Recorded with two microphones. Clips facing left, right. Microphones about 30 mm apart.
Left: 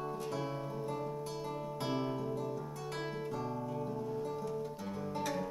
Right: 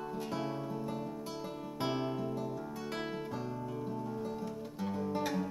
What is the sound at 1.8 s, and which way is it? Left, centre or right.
Music, centre.